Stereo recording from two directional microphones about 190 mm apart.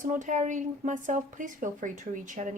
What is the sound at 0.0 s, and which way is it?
A woman's voice, 40° right (ahead or behind).